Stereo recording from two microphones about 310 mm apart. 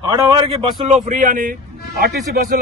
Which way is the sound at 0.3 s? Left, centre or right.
Centre.